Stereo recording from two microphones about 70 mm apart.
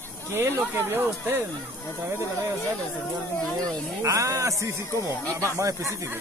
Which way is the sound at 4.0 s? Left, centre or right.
Right.